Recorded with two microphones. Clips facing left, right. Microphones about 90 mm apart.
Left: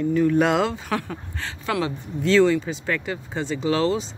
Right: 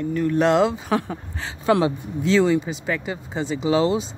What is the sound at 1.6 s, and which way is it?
Speech, 25° right (ahead or behind).